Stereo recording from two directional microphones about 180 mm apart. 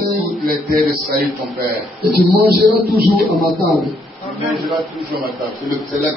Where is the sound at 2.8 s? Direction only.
55° right (ahead or behind).